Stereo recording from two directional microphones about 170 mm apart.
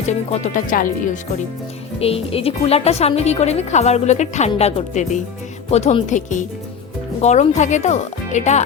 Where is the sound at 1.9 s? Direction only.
35° left (ahead or behind).